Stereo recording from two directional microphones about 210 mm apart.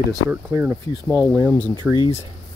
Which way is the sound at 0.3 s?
10° right (ahead or behind).